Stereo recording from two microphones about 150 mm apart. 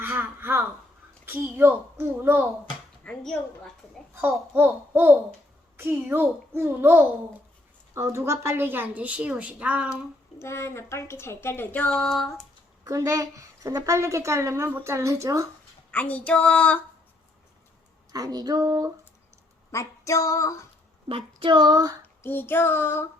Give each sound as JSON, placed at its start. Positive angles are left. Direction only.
{"t": 0.0, "sound": "speech", "side_deg": -15}
{"t": 3.0, "sound": "speech", "side_deg": 5}
{"t": 4.1, "sound": "speech", "side_deg": -15}
{"t": 10.3, "sound": "speech", "side_deg": 20}
{"t": 12.8, "sound": "a woman's voice", "side_deg": -20}
{"t": 15.9, "sound": "speech", "side_deg": 10}
{"t": 18.1, "sound": "a woman's voice", "side_deg": -25}
{"t": 19.7, "sound": "female singing", "side_deg": 20}
{"t": 21.1, "sound": "child singing", "side_deg": -35}
{"t": 22.0, "sound": "child singing", "side_deg": 15}